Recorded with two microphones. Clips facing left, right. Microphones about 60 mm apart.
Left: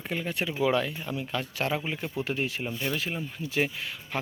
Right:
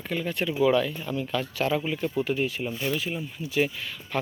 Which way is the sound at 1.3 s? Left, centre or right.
Left.